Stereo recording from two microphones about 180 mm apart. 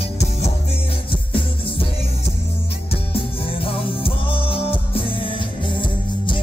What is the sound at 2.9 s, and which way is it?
Music, 30° left (ahead or behind).